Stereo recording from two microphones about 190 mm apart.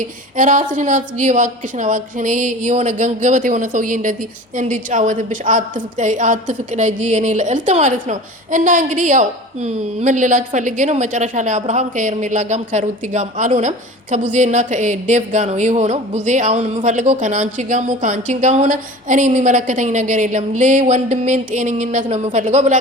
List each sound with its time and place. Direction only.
0.0 s a woman's voice: 45° right (ahead or behind)